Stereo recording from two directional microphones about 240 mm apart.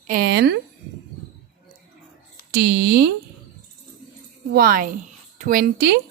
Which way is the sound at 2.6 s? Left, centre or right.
Right.